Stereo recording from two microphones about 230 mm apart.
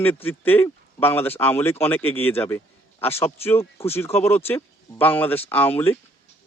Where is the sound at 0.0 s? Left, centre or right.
Centre.